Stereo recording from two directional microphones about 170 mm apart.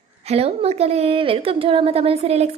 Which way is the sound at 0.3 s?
35° right (ahead or behind).